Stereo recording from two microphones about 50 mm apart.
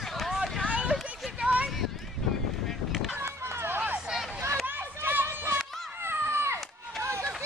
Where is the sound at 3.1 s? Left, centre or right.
Right.